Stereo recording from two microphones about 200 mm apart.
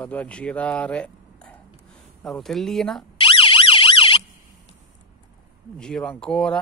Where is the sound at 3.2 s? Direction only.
25° left (ahead or behind).